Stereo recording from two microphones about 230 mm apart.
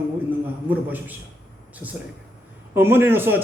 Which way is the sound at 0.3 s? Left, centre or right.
Centre.